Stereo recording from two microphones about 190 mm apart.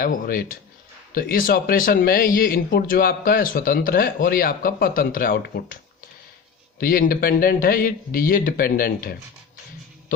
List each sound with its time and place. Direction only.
0.0 s speech: 50° left (ahead or behind)
6.7 s speech: 50° left (ahead or behind)